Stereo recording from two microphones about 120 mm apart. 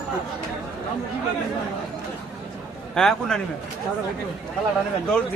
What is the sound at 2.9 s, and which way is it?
Speech, 5° left (ahead or behind).